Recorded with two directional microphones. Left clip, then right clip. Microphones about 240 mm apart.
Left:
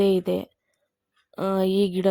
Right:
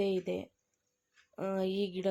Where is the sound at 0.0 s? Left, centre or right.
Left.